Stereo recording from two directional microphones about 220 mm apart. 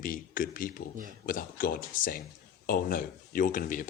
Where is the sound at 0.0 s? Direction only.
40° left (ahead or behind).